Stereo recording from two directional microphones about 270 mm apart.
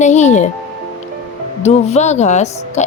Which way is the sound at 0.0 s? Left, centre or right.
Left.